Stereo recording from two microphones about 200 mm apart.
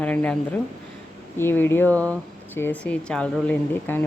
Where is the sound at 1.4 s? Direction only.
10° left (ahead or behind).